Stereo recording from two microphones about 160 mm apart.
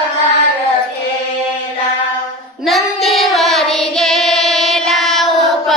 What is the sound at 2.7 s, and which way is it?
Child singing, centre (ahead or behind).